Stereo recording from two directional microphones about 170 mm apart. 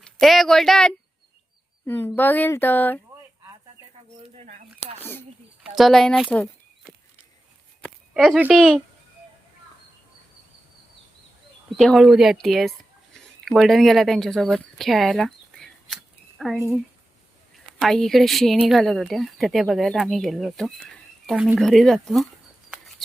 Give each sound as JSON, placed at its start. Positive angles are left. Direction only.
{"t": 0.0, "sound": "speech", "side_deg": 0}
{"t": 4.4, "sound": "a sound", "side_deg": -45}
{"t": 4.9, "sound": "a sound", "side_deg": 10}
{"t": 5.6, "sound": "speech", "side_deg": 0}
{"t": 7.9, "sound": "speech", "side_deg": 0}
{"t": 11.8, "sound": "speech", "side_deg": 0}
{"t": 16.6, "sound": "speech", "side_deg": -15}
{"t": 17.7, "sound": "speech", "side_deg": 0}